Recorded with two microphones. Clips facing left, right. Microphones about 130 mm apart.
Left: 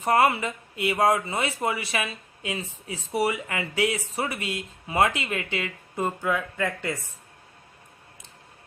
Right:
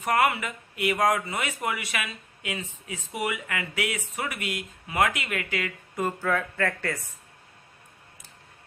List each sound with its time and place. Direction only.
0.0 s speech: 30° left (ahead or behind)